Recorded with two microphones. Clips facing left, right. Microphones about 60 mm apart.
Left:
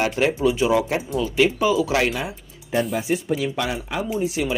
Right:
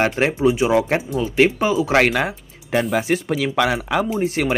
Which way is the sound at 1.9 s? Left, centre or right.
Right.